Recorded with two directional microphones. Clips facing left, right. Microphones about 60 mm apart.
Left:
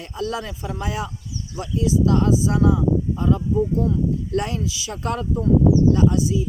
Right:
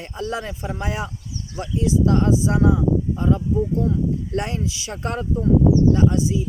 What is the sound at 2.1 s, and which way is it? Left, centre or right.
Speech, right.